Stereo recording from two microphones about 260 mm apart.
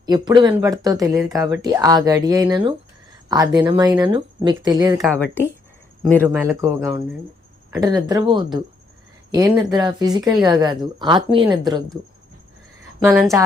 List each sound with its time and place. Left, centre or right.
0.0 s speech: centre
5.0 s speech: centre
6.6 s speech: centre